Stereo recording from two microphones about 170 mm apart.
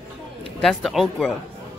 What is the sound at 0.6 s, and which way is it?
Speech, centre (ahead or behind).